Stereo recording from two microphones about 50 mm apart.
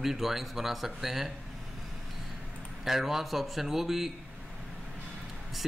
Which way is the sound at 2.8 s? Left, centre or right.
Centre.